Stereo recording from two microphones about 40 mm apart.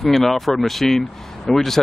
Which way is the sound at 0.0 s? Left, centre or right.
Centre.